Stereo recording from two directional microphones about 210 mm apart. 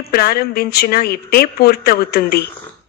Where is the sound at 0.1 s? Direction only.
45° left (ahead or behind).